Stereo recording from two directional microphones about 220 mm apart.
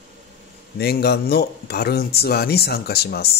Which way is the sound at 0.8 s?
45° left (ahead or behind).